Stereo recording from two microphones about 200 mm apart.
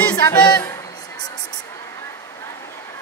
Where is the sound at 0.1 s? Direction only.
20° left (ahead or behind).